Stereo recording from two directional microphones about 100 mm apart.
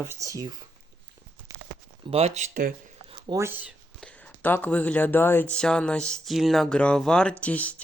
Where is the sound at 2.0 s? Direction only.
85° right.